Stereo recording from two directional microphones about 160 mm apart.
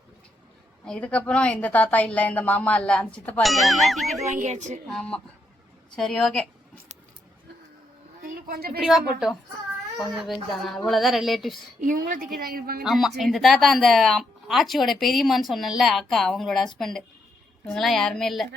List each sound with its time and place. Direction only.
0.9 s a woman's voice: 5° left (ahead or behind)
4.3 s speech: 50° right (ahead or behind)
4.9 s speech: 5° left (ahead or behind)
8.3 s a sound: 70° right (ahead or behind)
10.0 s speech: centre (ahead or behind)
11.8 s a woman's voice: 55° right (ahead or behind); by 12.8 s 70° right (ahead or behind)
12.8 s speech: centre (ahead or behind)